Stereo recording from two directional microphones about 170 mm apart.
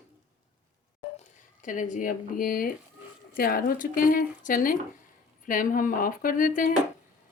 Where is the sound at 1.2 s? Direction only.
50° left (ahead or behind).